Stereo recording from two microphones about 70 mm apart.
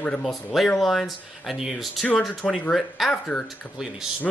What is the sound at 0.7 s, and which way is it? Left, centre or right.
Speech, centre.